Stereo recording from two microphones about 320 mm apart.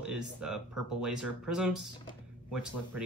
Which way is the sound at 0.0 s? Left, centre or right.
Centre.